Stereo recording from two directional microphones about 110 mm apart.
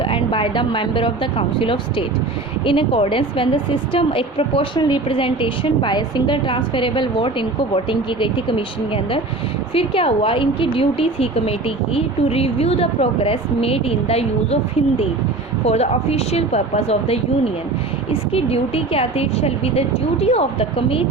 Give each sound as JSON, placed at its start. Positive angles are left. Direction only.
{"t": 0.0, "sound": "a woman's voice", "side_deg": 50}